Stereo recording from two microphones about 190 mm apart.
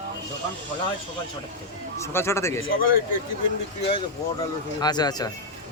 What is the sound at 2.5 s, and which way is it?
Speech, 90° left.